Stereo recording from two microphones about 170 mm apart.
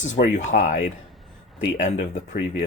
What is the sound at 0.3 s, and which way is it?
Speech, 45° left (ahead or behind).